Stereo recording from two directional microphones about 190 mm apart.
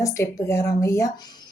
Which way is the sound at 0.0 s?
15° left (ahead or behind).